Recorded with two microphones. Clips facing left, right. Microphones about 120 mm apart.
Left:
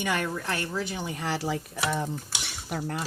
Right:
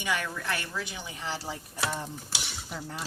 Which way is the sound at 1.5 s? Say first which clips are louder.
Left 5 dB; 80° left.